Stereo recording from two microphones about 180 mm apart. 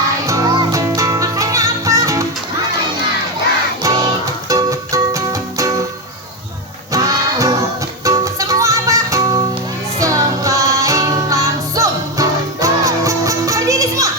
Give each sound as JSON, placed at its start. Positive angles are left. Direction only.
{"t": 0.3, "sound": "music", "side_deg": -20}
{"t": 3.8, "sound": "music", "side_deg": -20}
{"t": 6.9, "sound": "music", "side_deg": -20}